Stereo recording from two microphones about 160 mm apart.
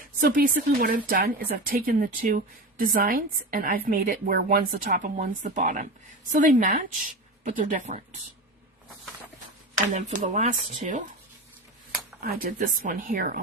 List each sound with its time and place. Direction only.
0.2 s speech: 60° right (ahead or behind); by 8.2 s 45° right (ahead or behind)
9.9 s speech: 50° right (ahead or behind)
12.2 s speech: 70° right (ahead or behind)
12.5 s speech: 55° right (ahead or behind)